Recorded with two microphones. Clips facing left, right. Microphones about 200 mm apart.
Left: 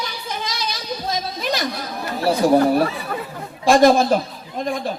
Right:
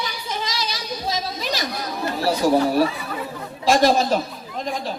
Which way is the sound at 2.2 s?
55° left (ahead or behind).